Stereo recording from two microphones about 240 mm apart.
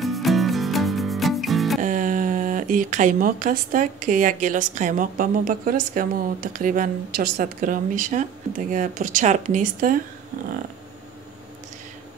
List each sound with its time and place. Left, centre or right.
0.0 s music: centre
1.8 s speech: right